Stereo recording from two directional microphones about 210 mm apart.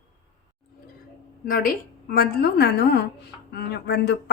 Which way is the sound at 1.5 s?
45° left (ahead or behind).